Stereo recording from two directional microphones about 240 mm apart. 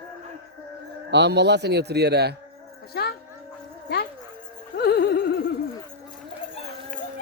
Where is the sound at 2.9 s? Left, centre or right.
Left.